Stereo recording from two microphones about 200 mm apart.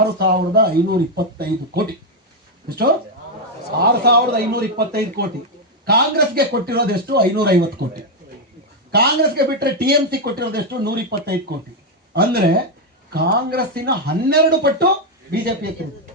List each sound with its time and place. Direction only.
0.2 s speech: 50° right (ahead or behind)
8.9 s speech: 50° right (ahead or behind)
12.1 s speech: 50° right (ahead or behind)